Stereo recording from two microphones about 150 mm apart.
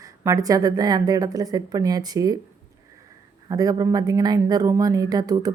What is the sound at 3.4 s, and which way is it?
Speech, 25° right (ahead or behind).